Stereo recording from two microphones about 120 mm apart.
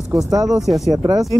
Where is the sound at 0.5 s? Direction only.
Centre (ahead or behind).